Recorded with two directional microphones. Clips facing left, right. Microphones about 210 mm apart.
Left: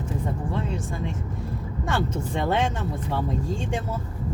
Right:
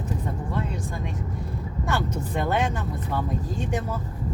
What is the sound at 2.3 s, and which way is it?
Speech, 25° left (ahead or behind).